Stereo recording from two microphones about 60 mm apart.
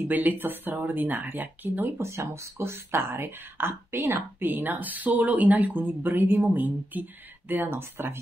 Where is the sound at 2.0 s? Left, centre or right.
Right.